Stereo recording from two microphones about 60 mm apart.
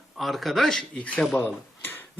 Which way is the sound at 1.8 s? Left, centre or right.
Left.